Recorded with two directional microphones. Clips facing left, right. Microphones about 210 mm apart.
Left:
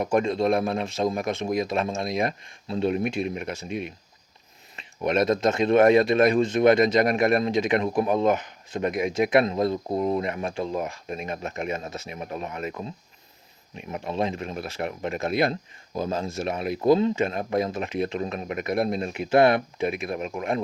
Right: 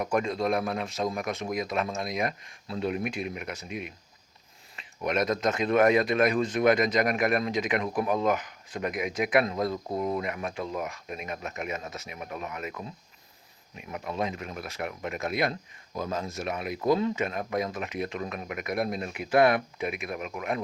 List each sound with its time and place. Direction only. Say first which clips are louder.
0.0 s speech: left 5 dB; 25° left (ahead or behind)